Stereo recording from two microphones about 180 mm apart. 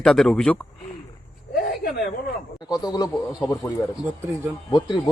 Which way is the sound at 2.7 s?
20° left (ahead or behind).